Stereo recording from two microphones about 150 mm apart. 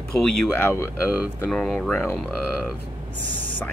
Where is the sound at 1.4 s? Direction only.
5° left (ahead or behind).